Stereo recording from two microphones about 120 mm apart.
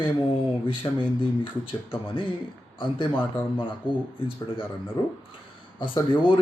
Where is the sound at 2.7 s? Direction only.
45° left (ahead or behind).